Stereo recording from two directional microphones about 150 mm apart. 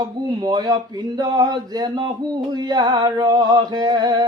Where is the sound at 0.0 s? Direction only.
25° right (ahead or behind).